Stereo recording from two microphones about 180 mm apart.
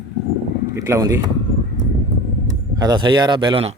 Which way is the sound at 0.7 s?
15° right (ahead or behind).